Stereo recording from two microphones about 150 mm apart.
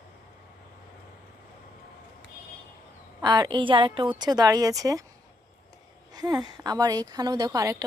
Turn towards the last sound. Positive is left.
turn(degrees=-25)  # may be behind; listen again after turning